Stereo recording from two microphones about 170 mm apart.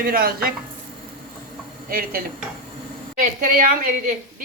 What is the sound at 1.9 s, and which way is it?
A woman's voice, 60° right (ahead or behind).